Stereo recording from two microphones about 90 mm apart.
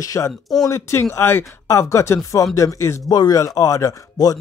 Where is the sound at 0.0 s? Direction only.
35° left (ahead or behind).